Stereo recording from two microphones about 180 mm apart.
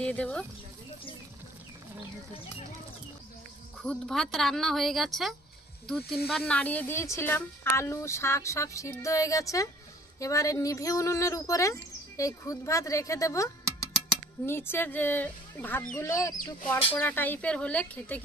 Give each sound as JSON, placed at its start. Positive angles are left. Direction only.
{"t": 0.0, "sound": "speech", "side_deg": 5}
{"t": 3.8, "sound": "speech", "side_deg": 5}